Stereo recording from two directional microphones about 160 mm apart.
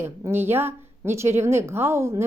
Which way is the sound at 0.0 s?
15° right (ahead or behind).